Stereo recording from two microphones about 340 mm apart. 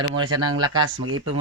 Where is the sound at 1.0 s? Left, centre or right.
Right.